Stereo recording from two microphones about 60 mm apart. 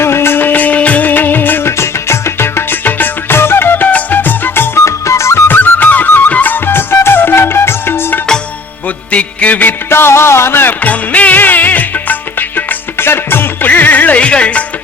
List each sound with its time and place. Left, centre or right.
0.0 s music: left
1.7 s music: left
4.9 s music: left
5.5 s music: left
9.1 s music: left
9.9 s music: left; by 14.6 s centre